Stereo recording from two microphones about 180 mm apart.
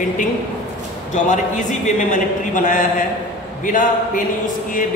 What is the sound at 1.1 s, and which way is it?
A man's voice, 40° left (ahead or behind).